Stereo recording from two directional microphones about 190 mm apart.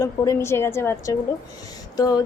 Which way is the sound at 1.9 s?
20° left (ahead or behind).